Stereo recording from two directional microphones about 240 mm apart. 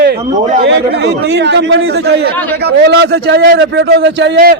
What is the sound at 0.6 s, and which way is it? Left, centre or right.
A man's voice, right.